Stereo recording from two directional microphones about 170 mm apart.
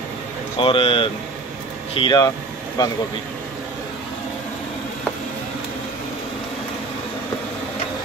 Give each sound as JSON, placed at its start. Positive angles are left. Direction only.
{"t": 0.6, "sound": "speech", "side_deg": 35}